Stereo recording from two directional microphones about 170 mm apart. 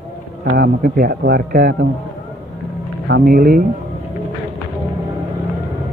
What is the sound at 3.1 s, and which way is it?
Speech, 60° right (ahead or behind).